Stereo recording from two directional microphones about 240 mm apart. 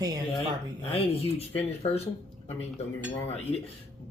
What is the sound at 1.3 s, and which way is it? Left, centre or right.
Speech, left.